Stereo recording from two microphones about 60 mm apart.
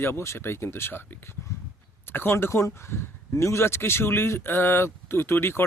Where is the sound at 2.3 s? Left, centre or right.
Left.